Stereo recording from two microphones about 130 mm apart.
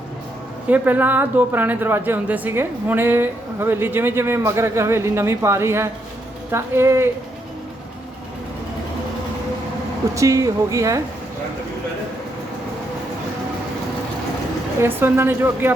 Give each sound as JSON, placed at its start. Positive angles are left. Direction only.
{"t": 0.7, "sound": "a woman's voice", "side_deg": -15}
{"t": 10.2, "sound": "speech", "side_deg": -25}
{"t": 14.8, "sound": "a woman's voice", "side_deg": -15}